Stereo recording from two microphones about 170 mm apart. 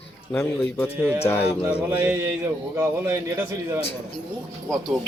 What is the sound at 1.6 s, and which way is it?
Speech, 15° right (ahead or behind).